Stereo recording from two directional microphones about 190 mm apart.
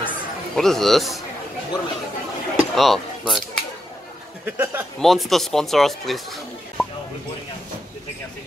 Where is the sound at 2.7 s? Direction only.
Centre (ahead or behind).